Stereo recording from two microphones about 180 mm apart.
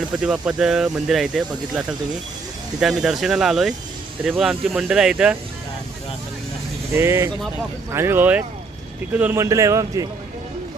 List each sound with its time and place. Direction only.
0.2 s speech: 5° right (ahead or behind)
6.9 s a man's voice: 15° right (ahead or behind)